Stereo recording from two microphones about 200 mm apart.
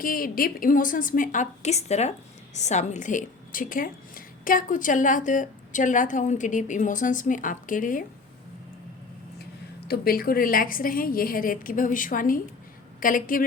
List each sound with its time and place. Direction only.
0.0 s a woman's voice: 45° left (ahead or behind)
9.8 s a woman's voice: 50° left (ahead or behind)